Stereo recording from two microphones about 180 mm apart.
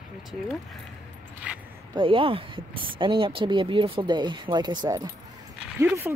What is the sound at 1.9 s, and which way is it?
Speech, 30° right (ahead or behind).